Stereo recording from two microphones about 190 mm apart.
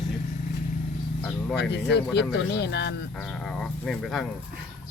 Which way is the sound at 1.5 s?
65° left (ahead or behind).